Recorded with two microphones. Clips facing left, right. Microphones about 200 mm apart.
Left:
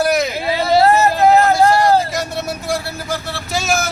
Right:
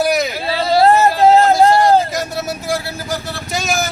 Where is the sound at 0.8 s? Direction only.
30° right (ahead or behind).